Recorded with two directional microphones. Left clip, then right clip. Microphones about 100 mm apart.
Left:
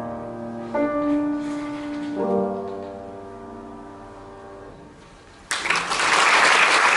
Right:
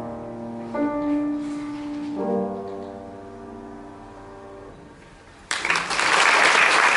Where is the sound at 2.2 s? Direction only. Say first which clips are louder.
Left 3 dB; 15° right (ahead or behind).